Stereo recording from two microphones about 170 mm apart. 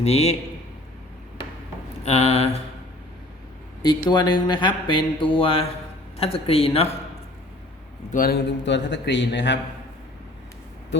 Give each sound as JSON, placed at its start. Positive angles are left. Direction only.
{"t": 0.0, "sound": "speech", "side_deg": 40}
{"t": 2.0, "sound": "speech", "side_deg": 40}
{"t": 4.1, "sound": "speech", "side_deg": 25}
{"t": 8.1, "sound": "a man's voice", "side_deg": 60}